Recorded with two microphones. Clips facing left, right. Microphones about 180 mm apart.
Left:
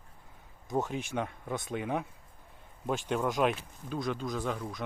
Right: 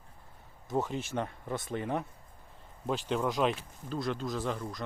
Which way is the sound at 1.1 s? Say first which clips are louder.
Even; 5° right (ahead or behind).